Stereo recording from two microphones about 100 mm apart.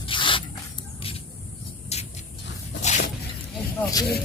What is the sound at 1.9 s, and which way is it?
Vehicle, 90° left.